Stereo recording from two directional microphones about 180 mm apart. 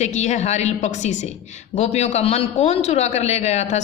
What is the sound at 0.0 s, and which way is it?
A woman's voice, 40° left (ahead or behind).